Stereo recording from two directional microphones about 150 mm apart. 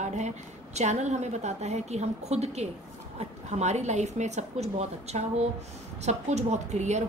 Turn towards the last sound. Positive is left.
turn(degrees=-50)  # may be behind; listen again after turning